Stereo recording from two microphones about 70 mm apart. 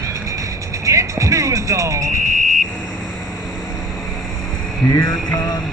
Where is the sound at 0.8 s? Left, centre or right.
Right.